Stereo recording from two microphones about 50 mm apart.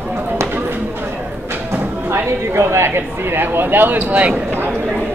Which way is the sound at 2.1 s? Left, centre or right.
Right.